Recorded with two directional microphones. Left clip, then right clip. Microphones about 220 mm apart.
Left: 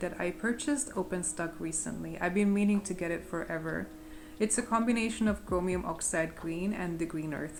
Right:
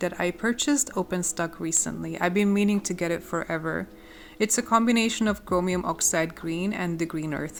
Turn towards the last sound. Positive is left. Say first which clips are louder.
# right 6 dB
turn(degrees=-50)  # may be behind; listen again after turning